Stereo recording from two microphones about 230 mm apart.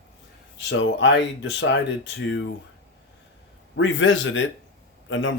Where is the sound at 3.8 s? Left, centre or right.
Left.